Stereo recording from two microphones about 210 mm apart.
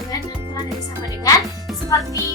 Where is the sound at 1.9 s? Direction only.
15° left (ahead or behind).